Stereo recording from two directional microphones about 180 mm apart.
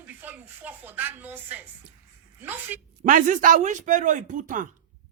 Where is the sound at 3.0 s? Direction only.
45° right (ahead or behind).